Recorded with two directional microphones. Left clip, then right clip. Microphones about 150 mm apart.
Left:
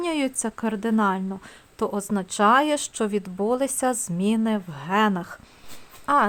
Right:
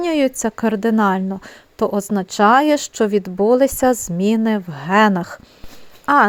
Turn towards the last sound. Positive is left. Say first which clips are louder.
# right 7 dB
turn(degrees=-40)  # may be behind; listen again after turning